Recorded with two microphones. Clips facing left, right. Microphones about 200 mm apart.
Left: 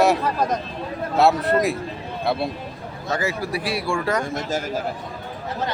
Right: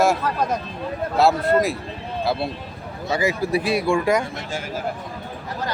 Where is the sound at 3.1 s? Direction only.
10° right (ahead or behind).